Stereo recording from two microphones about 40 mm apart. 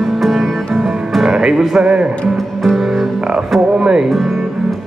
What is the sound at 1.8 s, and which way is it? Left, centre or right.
Speech, right.